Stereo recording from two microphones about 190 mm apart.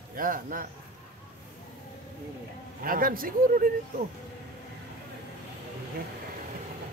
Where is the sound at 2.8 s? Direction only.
50° right (ahead or behind).